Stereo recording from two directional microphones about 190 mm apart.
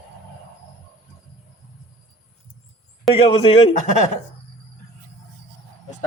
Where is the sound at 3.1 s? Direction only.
30° left (ahead or behind).